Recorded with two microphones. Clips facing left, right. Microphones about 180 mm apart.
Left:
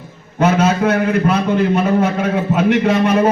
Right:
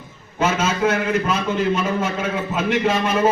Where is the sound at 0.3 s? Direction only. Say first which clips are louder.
Left 6 dB; 60° left (ahead or behind).